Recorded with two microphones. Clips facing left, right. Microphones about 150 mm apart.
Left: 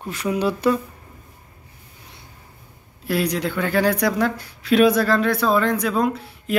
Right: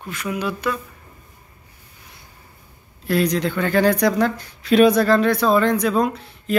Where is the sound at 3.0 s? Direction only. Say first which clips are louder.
Right 3 dB; 10° left (ahead or behind).